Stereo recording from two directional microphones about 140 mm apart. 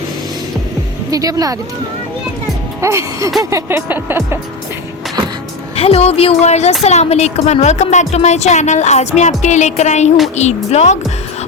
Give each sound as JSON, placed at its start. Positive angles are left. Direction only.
{"t": 1.1, "sound": "music", "side_deg": -25}
{"t": 2.8, "sound": "music", "side_deg": -20}
{"t": 5.7, "sound": "speech", "side_deg": 45}
{"t": 9.4, "sound": "music", "side_deg": 55}
{"t": 10.3, "sound": "speech", "side_deg": 50}